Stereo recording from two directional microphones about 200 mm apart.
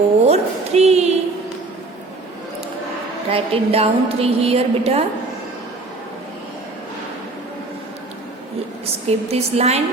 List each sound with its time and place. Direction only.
0.3 s a sound: 30° right (ahead or behind)
3.2 s a woman's voice: 30° right (ahead or behind)
9.0 s a woman's voice: 30° right (ahead or behind)